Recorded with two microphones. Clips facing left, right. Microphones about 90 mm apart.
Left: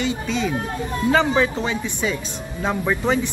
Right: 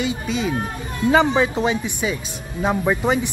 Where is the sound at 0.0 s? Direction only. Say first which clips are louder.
Even; 10° right (ahead or behind).